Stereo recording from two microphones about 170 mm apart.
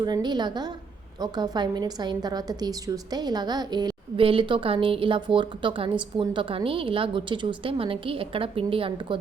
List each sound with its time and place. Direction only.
0.0 s a woman's voice: 25° right (ahead or behind)